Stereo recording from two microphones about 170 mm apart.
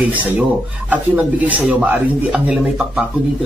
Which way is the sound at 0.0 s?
10° right (ahead or behind).